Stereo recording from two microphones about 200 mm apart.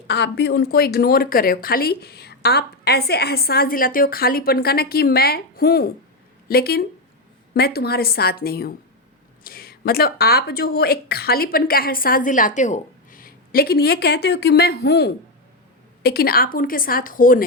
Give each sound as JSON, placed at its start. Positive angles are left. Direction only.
{"t": 0.1, "sound": "a woman's voice", "side_deg": 60}